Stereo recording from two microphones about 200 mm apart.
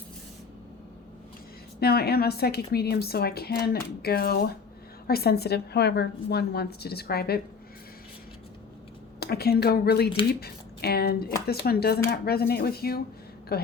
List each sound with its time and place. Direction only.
1.8 s a woman's voice: 50° left (ahead or behind)
9.2 s a woman's voice: 50° left (ahead or behind)